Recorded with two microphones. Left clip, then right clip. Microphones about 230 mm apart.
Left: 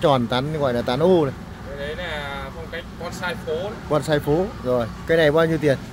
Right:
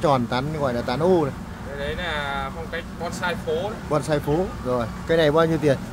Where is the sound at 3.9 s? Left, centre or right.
Left.